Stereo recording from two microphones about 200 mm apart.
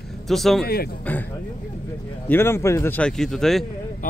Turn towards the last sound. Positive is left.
turn(degrees=0)  # may be behind; listen again after turning